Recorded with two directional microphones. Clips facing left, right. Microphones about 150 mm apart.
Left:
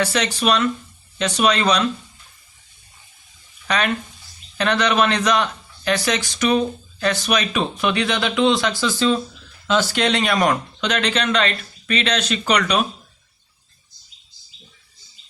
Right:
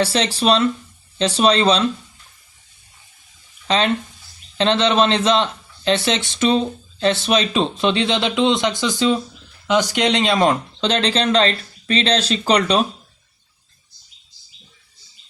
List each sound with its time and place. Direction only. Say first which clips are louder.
0.0 s a man's voice: right 2 dB; 30° right (ahead or behind)
3.7 s a man's voice: right 3 dB; 25° right (ahead or behind)